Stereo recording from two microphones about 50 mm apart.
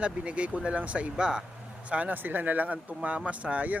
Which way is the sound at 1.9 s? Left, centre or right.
Right.